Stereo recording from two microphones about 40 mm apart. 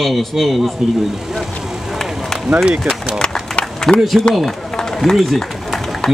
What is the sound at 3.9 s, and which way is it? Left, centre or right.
Speech, centre.